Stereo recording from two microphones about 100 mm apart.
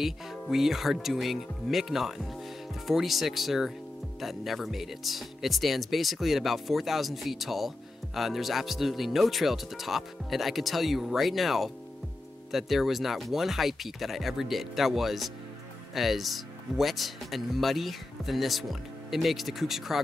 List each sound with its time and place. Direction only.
0.0 s speech: 5° right (ahead or behind)